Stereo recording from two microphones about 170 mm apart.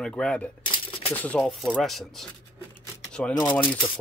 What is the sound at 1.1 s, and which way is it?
Speech, 5° left (ahead or behind).